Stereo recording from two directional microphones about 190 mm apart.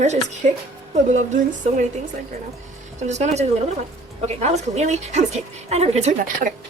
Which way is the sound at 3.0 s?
35° right (ahead or behind).